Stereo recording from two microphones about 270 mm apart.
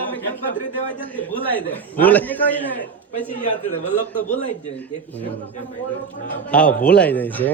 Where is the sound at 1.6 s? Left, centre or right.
Centre.